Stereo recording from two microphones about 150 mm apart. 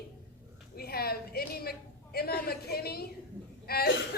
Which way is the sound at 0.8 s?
90° left.